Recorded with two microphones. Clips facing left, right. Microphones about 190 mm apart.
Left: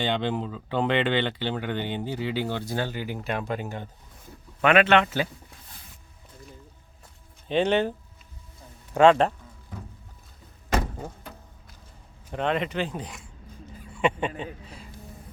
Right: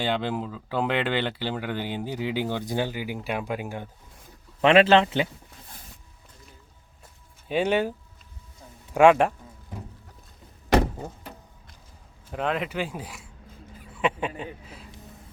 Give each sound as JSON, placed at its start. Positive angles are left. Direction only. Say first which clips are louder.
{"t": 0.0, "sound": "speech", "louder": "even", "side_deg": -10}
{"t": 4.6, "sound": "a man's voice", "louder": "right 2 dB", "side_deg": -25}
{"t": 7.4, "sound": "speech", "louder": "left 1 dB", "side_deg": -10}
{"t": 10.9, "sound": "door", "louder": "right 1 dB", "side_deg": -5}
{"t": 12.3, "sound": "speech", "louder": "left 1 dB", "side_deg": -5}